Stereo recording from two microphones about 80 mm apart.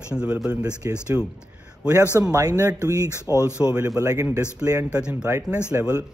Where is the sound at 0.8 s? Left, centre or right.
Right.